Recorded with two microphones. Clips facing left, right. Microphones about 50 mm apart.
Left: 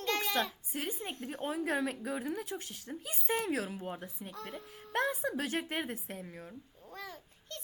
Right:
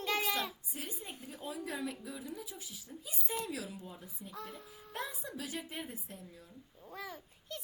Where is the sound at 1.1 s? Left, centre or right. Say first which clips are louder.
Left 7 dB; left.